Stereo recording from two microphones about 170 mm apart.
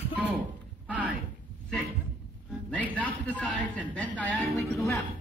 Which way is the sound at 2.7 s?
10° left (ahead or behind).